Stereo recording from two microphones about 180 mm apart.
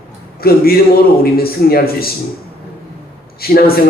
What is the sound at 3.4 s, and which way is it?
Speech, 55° left (ahead or behind).